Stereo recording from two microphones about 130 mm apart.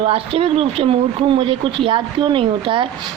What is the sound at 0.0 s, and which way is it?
Speech, 45° right (ahead or behind).